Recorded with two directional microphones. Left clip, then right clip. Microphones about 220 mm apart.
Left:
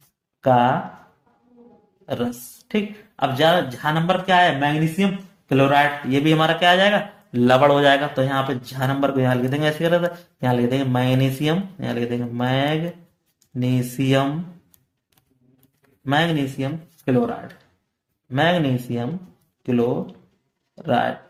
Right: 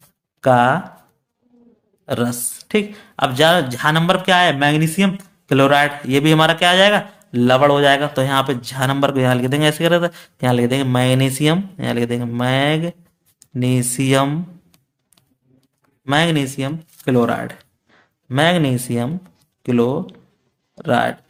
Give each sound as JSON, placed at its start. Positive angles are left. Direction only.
{"t": 0.4, "sound": "speech", "side_deg": -35}
{"t": 2.0, "sound": "speech", "side_deg": -35}
{"t": 16.0, "sound": "speech", "side_deg": -35}